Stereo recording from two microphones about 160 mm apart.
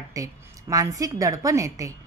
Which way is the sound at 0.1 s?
20° right (ahead or behind).